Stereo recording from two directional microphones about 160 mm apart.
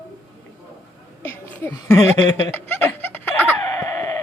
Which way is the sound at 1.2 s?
10° left (ahead or behind).